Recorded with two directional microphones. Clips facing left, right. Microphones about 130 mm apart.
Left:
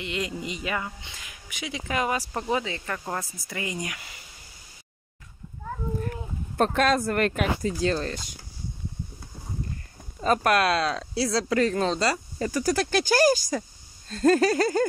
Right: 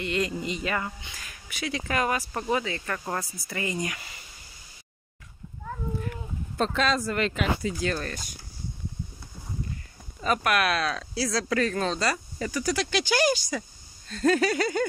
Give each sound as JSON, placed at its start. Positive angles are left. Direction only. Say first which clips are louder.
{"t": 0.0, "sound": "speech", "louder": "right 3 dB", "side_deg": 15}
{"t": 3.4, "sound": "speech", "louder": "right 2 dB", "side_deg": 10}
{"t": 5.9, "sound": "a sound", "louder": "left 2 dB", "side_deg": 45}
{"t": 7.8, "sound": "speech", "louder": "left 4 dB", "side_deg": 25}
{"t": 10.2, "sound": "speech", "louder": "left 3 dB", "side_deg": 35}